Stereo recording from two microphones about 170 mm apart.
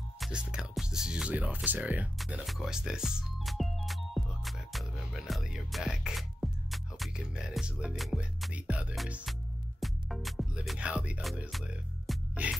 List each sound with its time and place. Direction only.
0.2 s speech: 5° right (ahead or behind)
9.8 s music: centre (ahead or behind)